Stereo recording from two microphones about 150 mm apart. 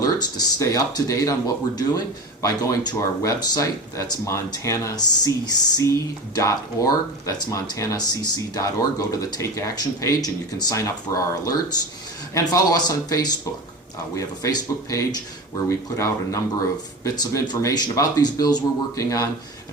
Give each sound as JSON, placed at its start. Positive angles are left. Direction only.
{"t": 0.0, "sound": "speech", "side_deg": 25}